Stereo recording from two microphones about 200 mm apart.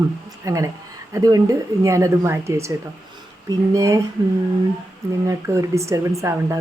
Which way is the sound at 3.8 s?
15° right (ahead or behind).